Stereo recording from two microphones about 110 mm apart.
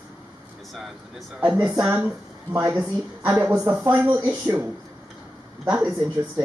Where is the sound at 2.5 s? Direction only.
30° right (ahead or behind).